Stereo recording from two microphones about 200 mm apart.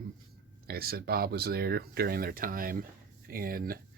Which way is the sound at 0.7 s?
50° right (ahead or behind).